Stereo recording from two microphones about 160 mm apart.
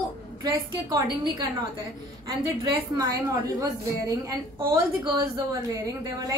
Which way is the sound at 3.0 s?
20° right (ahead or behind).